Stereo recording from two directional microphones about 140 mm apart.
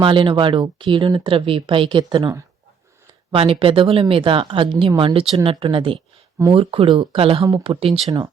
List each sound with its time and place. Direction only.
0.0 s speech: 35° right (ahead or behind)
3.3 s speech: 40° right (ahead or behind)